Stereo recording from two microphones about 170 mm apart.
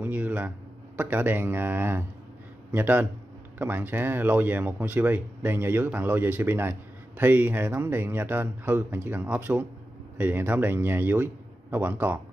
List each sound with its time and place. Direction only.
0.0 s speech: 10° right (ahead or behind)